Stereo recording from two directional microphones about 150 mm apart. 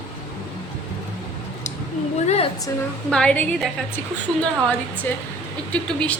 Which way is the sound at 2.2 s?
45° left (ahead or behind).